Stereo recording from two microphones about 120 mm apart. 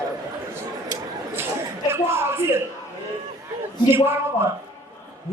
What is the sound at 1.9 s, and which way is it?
Speech, 20° right (ahead or behind).